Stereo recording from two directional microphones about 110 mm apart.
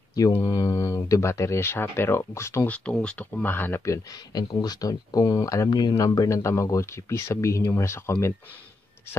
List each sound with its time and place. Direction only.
0.1 s speech: 35° left (ahead or behind)
2.7 s speech: 10° left (ahead or behind)